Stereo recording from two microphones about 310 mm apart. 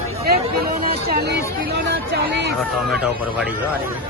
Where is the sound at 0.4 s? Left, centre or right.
Right.